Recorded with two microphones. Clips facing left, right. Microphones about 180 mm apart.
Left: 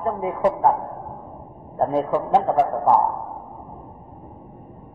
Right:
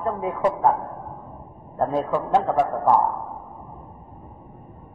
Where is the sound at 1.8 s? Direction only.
20° left (ahead or behind).